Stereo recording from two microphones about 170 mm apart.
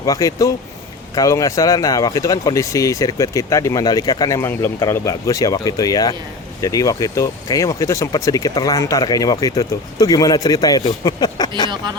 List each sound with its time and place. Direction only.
0.0 s speech: 20° left (ahead or behind)